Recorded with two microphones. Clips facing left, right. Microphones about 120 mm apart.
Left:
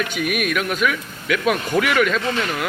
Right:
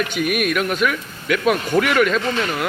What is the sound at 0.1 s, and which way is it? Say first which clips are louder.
Speech: right 2 dB; centre (ahead or behind).